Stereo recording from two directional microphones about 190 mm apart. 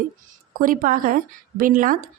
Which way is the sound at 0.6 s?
45° right (ahead or behind).